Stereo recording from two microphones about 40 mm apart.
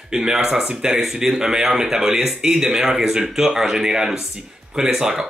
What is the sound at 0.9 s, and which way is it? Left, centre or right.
Speech, centre.